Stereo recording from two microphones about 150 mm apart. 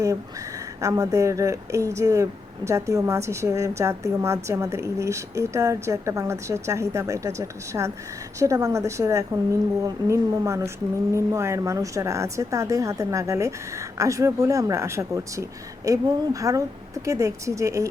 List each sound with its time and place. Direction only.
0.8 s a woman's voice: 20° right (ahead or behind)